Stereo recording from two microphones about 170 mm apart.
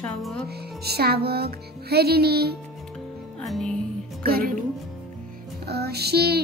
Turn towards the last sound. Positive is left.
turn(degrees=-70)  # may be behind; listen again after turning